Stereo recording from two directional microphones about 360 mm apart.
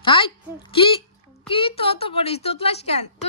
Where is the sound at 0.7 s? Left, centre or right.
Centre.